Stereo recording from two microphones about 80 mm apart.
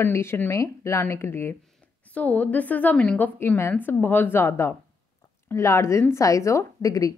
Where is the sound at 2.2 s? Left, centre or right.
Centre.